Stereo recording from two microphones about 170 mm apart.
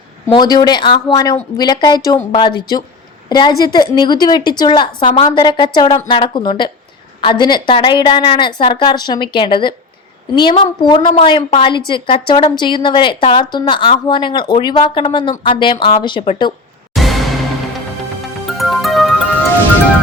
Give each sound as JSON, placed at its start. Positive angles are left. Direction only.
{"t": 0.3, "sound": "a woman's voice", "side_deg": 25}
{"t": 16.9, "sound": "music", "side_deg": 0}
{"t": 18.4, "sound": "music", "side_deg": 0}